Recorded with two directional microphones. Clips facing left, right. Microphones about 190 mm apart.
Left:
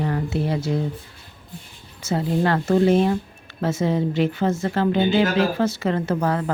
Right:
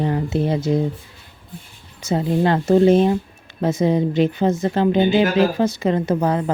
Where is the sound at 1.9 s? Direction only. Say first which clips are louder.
Right 3 dB; 20° right (ahead or behind).